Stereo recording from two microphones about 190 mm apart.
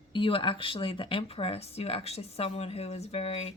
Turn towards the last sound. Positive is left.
turn(degrees=35)  # may be behind; listen again after turning